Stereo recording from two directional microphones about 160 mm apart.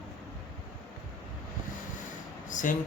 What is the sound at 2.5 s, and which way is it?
Speech, 55° left (ahead or behind).